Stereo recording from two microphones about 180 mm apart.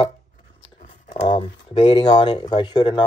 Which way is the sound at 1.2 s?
30° left (ahead or behind).